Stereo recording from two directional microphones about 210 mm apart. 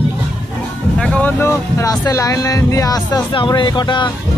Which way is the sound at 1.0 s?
5° left (ahead or behind).